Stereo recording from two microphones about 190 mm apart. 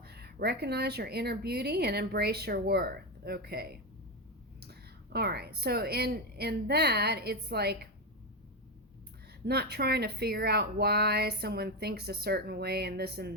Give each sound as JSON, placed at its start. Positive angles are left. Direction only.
{"t": 0.0, "sound": "speech", "side_deg": -55}
{"t": 9.5, "sound": "speech", "side_deg": -55}